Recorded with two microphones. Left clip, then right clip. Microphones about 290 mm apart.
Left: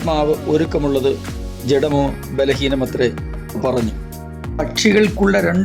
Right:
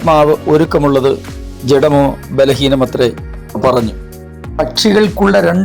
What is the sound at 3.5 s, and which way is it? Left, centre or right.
Music, centre.